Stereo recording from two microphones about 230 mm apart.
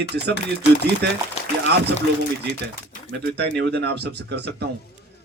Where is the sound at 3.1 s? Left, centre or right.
Right.